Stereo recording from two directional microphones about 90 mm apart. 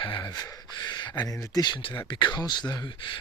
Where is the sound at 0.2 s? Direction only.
50° left (ahead or behind).